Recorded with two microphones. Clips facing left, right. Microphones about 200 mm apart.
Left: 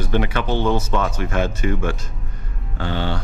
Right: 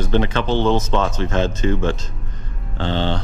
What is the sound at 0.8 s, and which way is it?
Speech, 25° right (ahead or behind).